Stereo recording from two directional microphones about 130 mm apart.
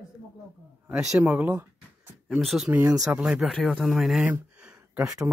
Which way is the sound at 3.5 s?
5° left (ahead or behind).